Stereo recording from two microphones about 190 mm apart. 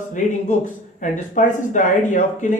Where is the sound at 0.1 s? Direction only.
40° left (ahead or behind).